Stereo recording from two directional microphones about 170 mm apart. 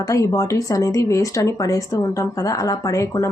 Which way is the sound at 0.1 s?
20° left (ahead or behind).